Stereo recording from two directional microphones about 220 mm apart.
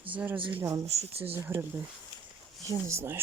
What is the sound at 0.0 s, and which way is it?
Speech, 5° right (ahead or behind).